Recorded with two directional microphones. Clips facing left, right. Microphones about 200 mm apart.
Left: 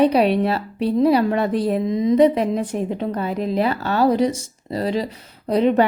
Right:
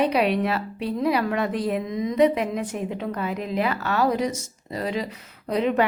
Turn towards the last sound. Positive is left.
turn(degrees=30)  # may be behind; listen again after turning